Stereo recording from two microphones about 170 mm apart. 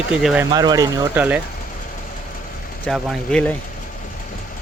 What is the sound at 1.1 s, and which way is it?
Speech, 10° right (ahead or behind).